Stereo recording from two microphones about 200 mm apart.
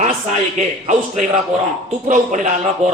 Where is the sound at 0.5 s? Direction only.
35° right (ahead or behind).